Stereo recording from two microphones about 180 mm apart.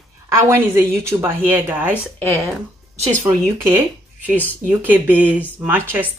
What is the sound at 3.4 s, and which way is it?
Speech, 15° right (ahead or behind).